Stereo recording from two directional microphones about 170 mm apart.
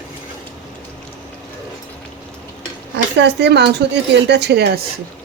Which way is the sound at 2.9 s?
85° right.